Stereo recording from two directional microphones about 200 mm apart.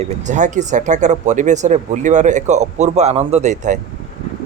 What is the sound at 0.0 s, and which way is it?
Speech, 35° right (ahead or behind).